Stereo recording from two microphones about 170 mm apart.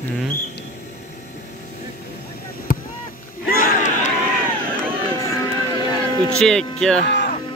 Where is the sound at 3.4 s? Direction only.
55° left (ahead or behind).